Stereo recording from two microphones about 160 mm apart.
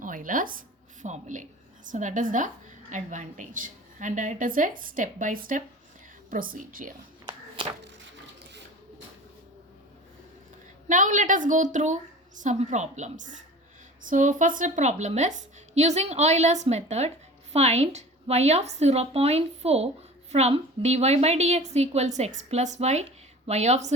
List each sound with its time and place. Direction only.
0.0 s a woman's voice: 55° right (ahead or behind)
10.8 s a woman's voice: 50° right (ahead or behind)